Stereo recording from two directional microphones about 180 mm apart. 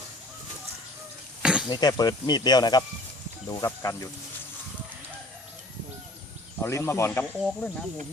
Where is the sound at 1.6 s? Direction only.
25° left (ahead or behind).